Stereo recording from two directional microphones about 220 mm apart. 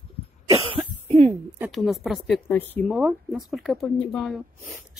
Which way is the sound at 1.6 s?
Centre (ahead or behind).